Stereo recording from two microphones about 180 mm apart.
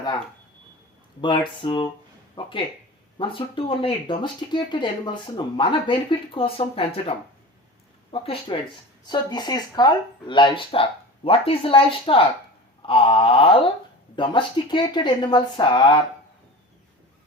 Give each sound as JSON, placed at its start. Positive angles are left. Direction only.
{"t": 1.2, "sound": "speech", "side_deg": 25}
{"t": 8.1, "sound": "speech", "side_deg": 30}